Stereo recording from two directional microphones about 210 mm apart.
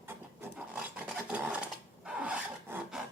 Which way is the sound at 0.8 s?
5° right (ahead or behind).